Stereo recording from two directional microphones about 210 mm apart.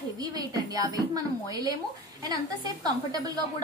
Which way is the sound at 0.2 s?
20° right (ahead or behind).